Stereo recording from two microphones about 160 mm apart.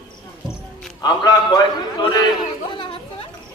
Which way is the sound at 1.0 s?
25° left (ahead or behind).